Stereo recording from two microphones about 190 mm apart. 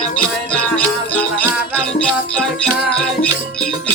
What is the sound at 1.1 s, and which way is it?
Music, 5° left (ahead or behind).